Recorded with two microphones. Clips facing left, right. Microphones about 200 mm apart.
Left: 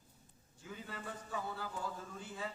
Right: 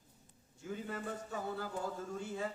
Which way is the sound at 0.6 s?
45° right (ahead or behind).